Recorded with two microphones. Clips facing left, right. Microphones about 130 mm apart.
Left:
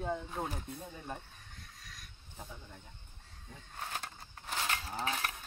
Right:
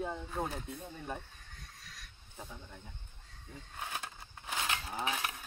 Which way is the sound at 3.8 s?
10° right (ahead or behind).